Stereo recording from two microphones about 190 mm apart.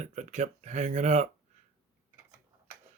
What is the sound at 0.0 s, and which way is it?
Speech, 35° right (ahead or behind).